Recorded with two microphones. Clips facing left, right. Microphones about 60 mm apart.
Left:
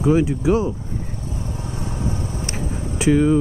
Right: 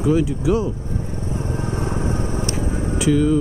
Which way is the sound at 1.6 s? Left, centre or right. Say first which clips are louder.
Right 4 dB; right.